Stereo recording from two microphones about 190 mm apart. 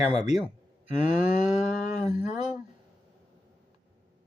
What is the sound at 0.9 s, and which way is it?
Cattle, 40° left (ahead or behind).